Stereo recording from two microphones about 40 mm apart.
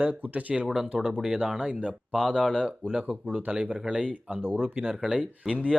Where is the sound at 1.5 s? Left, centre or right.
Right.